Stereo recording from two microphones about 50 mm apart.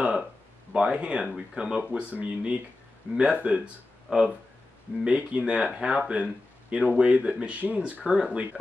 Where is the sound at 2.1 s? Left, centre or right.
Right.